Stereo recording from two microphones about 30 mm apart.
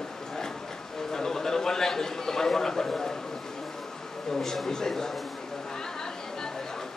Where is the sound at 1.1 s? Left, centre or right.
Centre.